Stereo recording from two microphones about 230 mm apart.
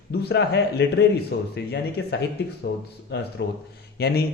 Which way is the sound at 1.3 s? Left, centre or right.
Left.